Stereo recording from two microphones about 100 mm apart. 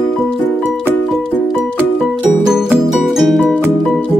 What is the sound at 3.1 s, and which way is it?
Music, centre (ahead or behind).